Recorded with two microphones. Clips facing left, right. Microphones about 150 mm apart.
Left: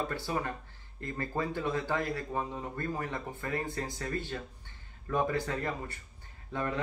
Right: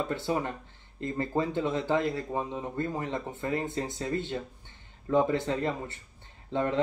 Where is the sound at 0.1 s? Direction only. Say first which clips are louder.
Right 4 dB; 20° right (ahead or behind).